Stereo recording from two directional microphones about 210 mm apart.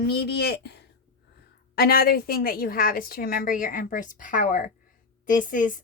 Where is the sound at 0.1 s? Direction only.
50° left (ahead or behind).